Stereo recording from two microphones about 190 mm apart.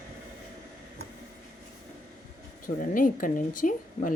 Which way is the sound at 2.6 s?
45° left (ahead or behind).